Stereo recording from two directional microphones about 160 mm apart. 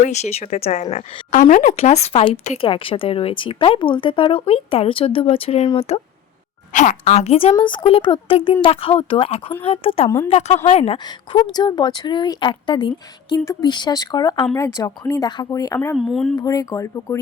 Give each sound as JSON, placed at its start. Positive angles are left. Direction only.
{"t": 0.0, "sound": "speech", "side_deg": 45}
{"t": 6.7, "sound": "a woman's voice", "side_deg": 50}
{"t": 10.9, "sound": "a woman's voice", "side_deg": 30}
{"t": 16.0, "sound": "speech", "side_deg": 0}
{"t": 16.4, "sound": "a woman's voice", "side_deg": 20}